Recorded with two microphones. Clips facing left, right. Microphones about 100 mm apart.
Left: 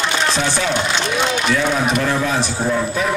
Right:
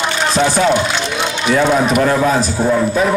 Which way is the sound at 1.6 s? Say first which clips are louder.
Right 5 dB; 50° right (ahead or behind).